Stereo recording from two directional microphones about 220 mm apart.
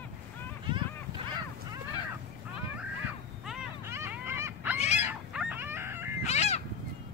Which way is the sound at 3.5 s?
10° right (ahead or behind).